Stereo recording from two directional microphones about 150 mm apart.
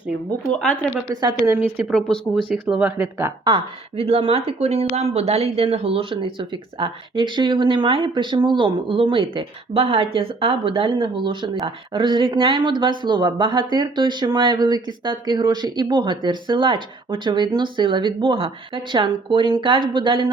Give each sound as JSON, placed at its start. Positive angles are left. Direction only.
{"t": 0.5, "sound": "speech", "side_deg": 10}
{"t": 1.1, "sound": "a woman's voice", "side_deg": -25}
{"t": 1.9, "sound": "speech", "side_deg": 5}
{"t": 2.5, "sound": "speech", "side_deg": -10}
{"t": 3.4, "sound": "speech", "side_deg": -35}